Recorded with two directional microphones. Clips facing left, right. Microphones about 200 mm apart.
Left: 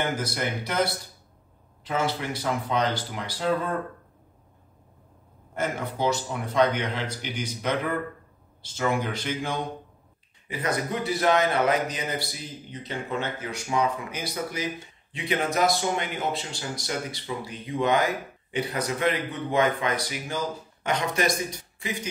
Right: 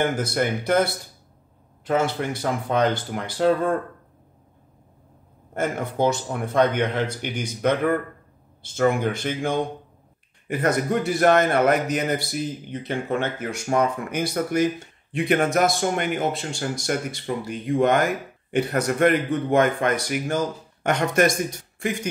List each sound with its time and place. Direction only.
0.2 s speech: 50° right (ahead or behind)
1.9 s speech: 55° right (ahead or behind)
5.5 s speech: 50° right (ahead or behind)